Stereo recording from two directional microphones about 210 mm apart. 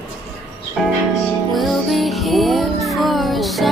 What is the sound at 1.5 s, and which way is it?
Music, centre (ahead or behind).